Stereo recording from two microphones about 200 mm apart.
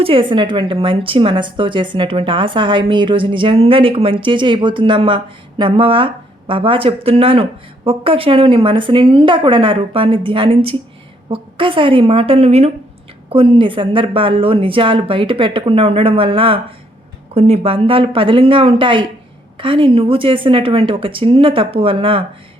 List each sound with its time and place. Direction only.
0.0 s a woman's voice: 25° right (ahead or behind)